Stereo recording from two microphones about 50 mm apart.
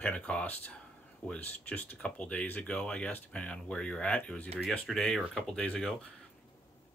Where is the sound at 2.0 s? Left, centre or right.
Left.